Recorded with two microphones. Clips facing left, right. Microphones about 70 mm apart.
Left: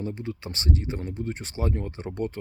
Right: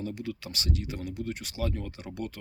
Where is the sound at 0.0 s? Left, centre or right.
Left.